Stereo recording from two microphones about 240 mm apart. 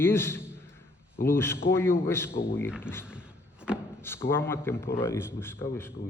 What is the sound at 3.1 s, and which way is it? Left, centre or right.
Vehicle, centre.